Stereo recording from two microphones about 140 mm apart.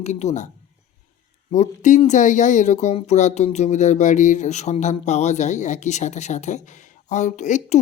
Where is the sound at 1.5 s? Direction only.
60° left (ahead or behind).